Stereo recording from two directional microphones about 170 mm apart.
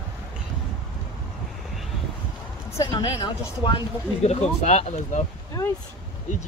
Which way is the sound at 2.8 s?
20° left (ahead or behind).